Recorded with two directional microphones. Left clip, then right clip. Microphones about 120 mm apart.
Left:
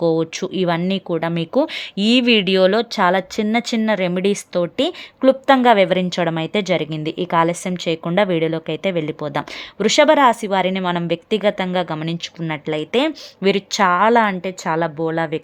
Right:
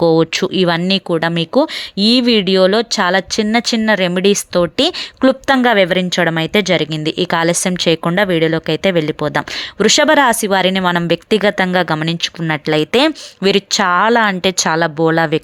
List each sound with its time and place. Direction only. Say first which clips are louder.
0.0 s speech: right 6 dB; 30° right (ahead or behind)
5.6 s speech: right 1 dB; 20° right (ahead or behind)
8.2 s speech: right 1 dB; 20° right (ahead or behind)
14.4 s speech: right 6 dB; 30° right (ahead or behind)